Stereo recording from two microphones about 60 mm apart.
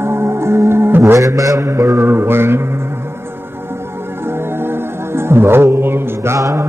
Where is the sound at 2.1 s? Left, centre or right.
Right.